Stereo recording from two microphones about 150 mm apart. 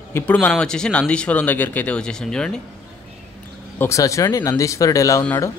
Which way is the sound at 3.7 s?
20° left (ahead or behind).